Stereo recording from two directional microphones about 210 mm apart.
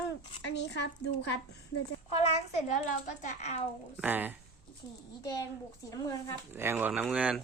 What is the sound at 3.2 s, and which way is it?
Speech, 35° left (ahead or behind).